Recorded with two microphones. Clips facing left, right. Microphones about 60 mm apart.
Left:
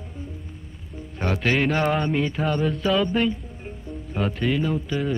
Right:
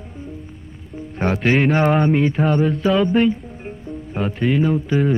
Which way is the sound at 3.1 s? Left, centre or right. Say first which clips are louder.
Right 6 dB; right.